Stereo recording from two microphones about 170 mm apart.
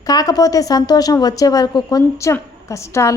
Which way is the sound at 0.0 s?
20° left (ahead or behind).